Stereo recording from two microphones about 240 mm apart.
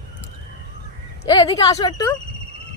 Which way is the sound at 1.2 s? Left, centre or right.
Centre.